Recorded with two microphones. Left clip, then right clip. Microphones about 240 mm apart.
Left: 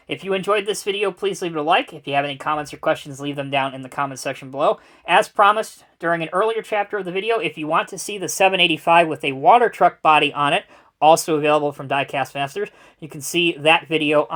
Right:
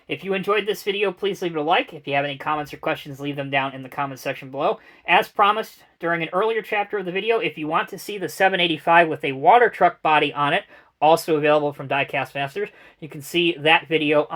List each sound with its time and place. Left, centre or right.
0.1 s speech: left